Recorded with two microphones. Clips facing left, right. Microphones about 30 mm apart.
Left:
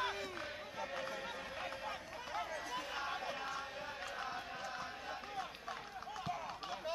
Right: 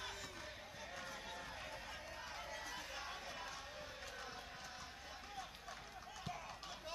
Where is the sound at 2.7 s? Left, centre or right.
Left.